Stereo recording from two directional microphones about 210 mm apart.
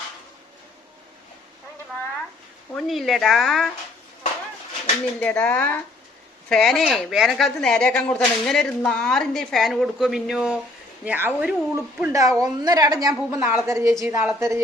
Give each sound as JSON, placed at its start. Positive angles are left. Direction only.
{"t": 2.7, "sound": "speech", "side_deg": 0}
{"t": 5.2, "sound": "speech", "side_deg": 5}